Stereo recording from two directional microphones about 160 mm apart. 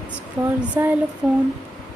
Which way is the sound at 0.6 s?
10° right (ahead or behind).